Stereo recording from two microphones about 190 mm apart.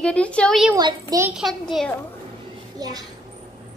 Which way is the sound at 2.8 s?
20° right (ahead or behind).